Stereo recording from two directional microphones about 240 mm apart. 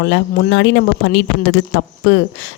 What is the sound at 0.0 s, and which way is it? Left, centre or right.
Speech, left.